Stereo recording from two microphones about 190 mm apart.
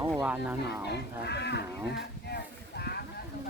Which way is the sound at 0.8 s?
60° left (ahead or behind).